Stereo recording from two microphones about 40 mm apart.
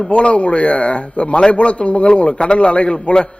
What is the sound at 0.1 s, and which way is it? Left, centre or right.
A man's voice, left.